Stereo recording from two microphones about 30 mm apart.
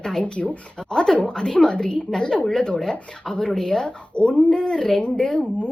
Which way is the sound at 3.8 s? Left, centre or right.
Left.